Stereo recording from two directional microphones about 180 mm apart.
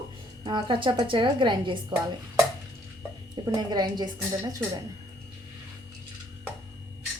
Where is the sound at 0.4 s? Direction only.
25° right (ahead or behind).